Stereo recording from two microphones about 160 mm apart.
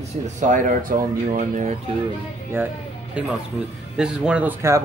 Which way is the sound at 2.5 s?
15° right (ahead or behind).